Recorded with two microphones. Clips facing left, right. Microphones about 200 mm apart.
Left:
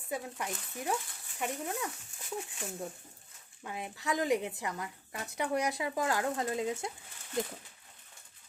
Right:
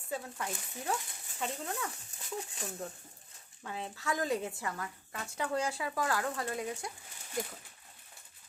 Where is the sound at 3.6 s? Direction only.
15° left (ahead or behind).